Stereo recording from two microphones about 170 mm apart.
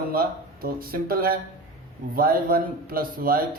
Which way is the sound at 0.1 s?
60° right (ahead or behind).